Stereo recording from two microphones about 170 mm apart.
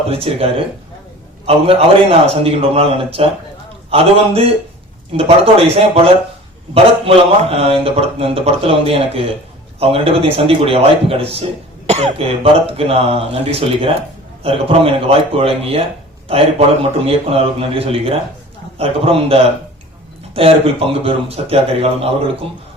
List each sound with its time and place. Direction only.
0.1 s a man's voice: 35° right (ahead or behind)
1.5 s a man's voice: 35° right (ahead or behind)
6.7 s a man's voice: 35° right (ahead or behind)